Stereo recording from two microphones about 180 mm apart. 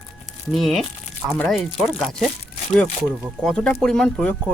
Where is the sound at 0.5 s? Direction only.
Centre (ahead or behind).